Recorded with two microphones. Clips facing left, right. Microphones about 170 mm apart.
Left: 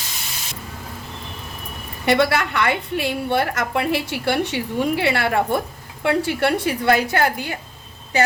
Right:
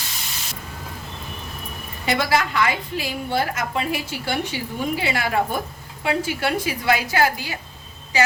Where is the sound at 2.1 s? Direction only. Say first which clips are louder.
Left 3 dB; 65° left (ahead or behind).